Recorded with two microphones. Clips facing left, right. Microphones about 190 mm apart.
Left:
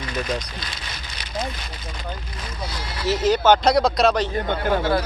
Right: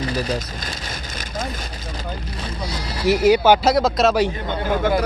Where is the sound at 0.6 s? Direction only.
45° right (ahead or behind).